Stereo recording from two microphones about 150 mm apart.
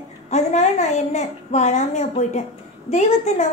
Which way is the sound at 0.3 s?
50° left (ahead or behind).